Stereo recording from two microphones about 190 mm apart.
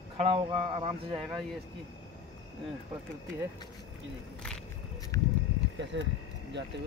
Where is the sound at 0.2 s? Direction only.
30° right (ahead or behind).